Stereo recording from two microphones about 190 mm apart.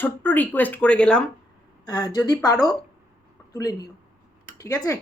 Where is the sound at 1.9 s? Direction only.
20° left (ahead or behind).